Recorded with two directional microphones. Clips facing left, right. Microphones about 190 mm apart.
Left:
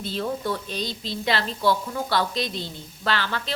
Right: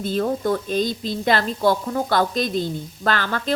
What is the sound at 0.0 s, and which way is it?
A woman's voice, 50° right (ahead or behind).